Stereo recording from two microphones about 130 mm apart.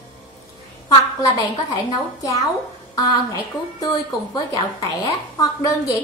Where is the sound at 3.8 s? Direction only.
25° left (ahead or behind).